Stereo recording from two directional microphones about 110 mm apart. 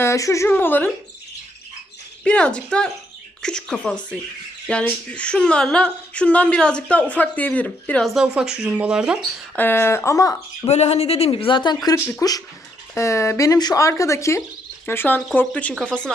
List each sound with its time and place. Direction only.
0.0 s a woman's voice: 25° left (ahead or behind)
0.4 s speech: 20° left (ahead or behind)
2.2 s speech: 10° left (ahead or behind)
8.0 s speech: 5° right (ahead or behind)
9.6 s speech: 20° left (ahead or behind)
10.7 s speech: 80° left; by 16.1 s 10° left (ahead or behind)